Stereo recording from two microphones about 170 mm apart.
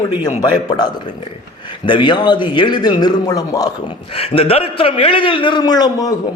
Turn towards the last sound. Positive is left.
turn(degrees=20)  # may be behind; listen again after turning